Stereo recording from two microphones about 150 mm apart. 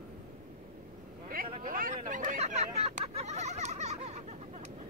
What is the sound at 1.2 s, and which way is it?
Speech, 70° right (ahead or behind).